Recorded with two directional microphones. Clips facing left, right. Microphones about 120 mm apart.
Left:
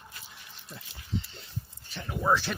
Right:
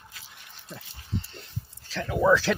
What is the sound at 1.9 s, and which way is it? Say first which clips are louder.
Speech: right 6 dB; 90° right.